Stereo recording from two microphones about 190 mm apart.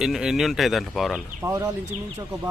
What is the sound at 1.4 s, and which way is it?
Speech, 15° right (ahead or behind).